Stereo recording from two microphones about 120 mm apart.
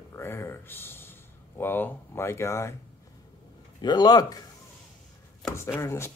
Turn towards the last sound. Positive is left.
turn(degrees=25)  # may be behind; listen again after turning